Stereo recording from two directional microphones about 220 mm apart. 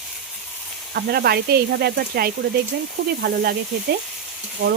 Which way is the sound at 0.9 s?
45° right (ahead or behind).